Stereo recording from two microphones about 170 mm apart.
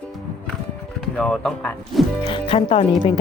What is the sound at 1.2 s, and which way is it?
Speech, 5° left (ahead or behind).